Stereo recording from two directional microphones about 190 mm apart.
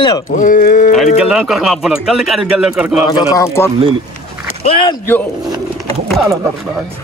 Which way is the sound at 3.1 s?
15° left (ahead or behind).